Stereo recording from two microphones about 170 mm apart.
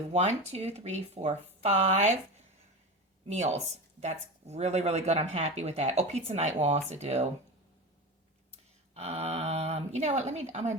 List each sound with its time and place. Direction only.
0.1 s speech: 40° right (ahead or behind)
3.2 s speech: 40° right (ahead or behind)
9.0 s speech: 40° right (ahead or behind)